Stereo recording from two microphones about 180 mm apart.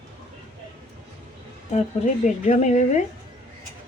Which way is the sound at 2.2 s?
40° left (ahead or behind).